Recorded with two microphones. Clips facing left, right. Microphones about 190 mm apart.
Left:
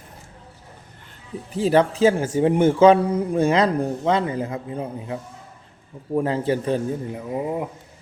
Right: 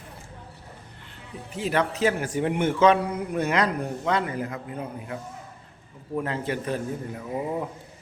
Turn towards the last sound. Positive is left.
turn(degrees=15)  # may be behind; listen again after turning